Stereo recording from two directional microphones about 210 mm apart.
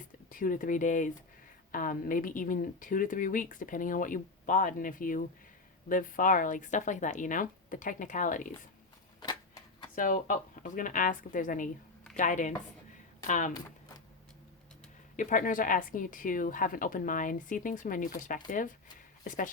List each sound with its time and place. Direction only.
0.0 s speech: 40° left (ahead or behind)
9.9 s speech: 40° left (ahead or behind)
15.1 s speech: 35° left (ahead or behind)